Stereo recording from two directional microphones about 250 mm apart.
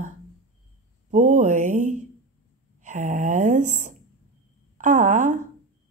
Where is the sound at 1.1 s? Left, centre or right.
Right.